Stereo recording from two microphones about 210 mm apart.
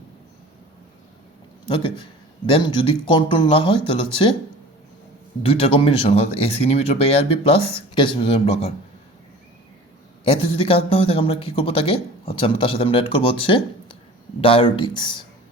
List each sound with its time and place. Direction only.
1.6 s a man's voice: 20° left (ahead or behind)
5.4 s a man's voice: 25° left (ahead or behind)
10.2 s a man's voice: 25° left (ahead or behind)